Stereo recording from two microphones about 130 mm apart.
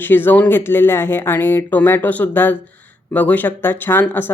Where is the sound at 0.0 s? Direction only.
15° left (ahead or behind).